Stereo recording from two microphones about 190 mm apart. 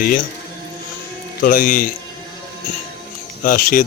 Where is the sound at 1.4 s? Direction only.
50° left (ahead or behind).